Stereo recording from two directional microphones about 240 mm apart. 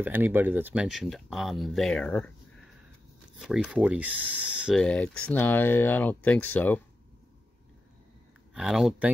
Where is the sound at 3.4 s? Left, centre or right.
Centre.